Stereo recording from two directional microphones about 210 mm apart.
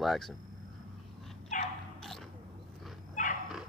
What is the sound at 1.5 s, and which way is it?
Dog, 35° left (ahead or behind).